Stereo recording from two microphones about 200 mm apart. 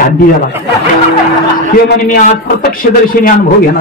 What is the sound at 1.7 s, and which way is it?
Speech, 45° left (ahead or behind).